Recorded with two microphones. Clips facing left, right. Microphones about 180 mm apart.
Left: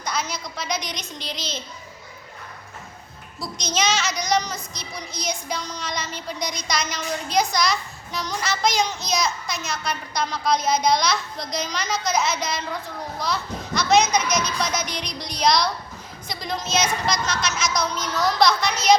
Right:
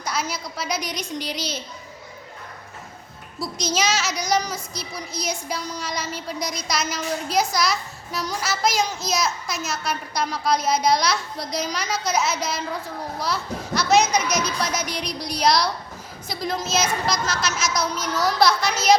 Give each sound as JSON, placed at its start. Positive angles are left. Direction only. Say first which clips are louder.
{"t": 0.0, "sound": "speech", "louder": "right 1 dB", "side_deg": -5}
{"t": 3.4, "sound": "a woman's voice", "louder": "right 1 dB", "side_deg": -5}